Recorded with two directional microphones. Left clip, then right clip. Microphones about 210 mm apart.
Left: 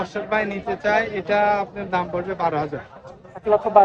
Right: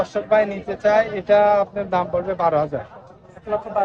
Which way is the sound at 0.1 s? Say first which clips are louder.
Right 5 dB; 50° right (ahead or behind).